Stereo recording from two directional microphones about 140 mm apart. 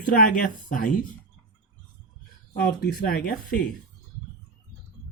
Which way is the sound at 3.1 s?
90° left.